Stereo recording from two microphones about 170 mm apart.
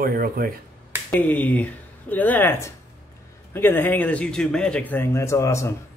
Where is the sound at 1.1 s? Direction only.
10° left (ahead or behind).